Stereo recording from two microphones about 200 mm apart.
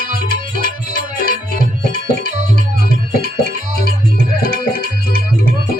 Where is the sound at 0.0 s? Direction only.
45° right (ahead or behind).